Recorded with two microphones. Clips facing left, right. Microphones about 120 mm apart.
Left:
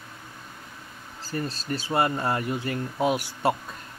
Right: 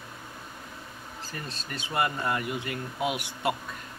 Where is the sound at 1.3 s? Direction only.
35° left (ahead or behind).